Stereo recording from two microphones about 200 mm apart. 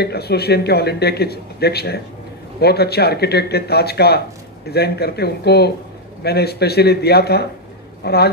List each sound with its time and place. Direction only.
0.0 s a woman's voice: 55° left (ahead or behind)